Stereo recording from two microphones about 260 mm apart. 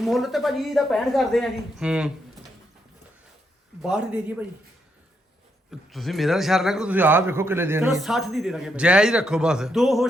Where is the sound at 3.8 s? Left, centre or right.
Centre.